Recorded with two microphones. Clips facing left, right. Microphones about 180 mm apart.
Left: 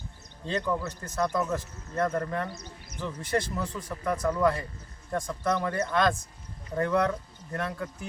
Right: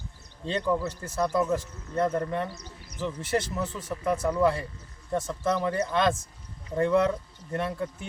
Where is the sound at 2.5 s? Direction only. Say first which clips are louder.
Left 1 dB; 35° right (ahead or behind).